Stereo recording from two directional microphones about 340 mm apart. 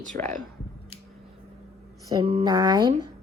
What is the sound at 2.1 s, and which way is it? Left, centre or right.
Speech, centre.